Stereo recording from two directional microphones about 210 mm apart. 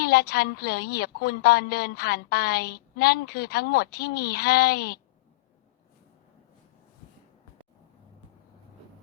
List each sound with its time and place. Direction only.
0.0 s a woman's voice: 50° left (ahead or behind)